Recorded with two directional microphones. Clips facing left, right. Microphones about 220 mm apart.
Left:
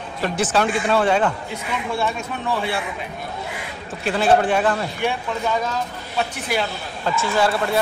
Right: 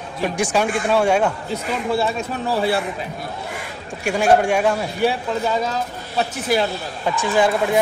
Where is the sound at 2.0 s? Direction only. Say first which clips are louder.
Right 2 dB; 35° right (ahead or behind).